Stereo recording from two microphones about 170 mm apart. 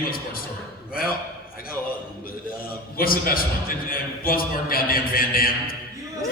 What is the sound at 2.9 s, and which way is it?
A man's voice, 60° left (ahead or behind).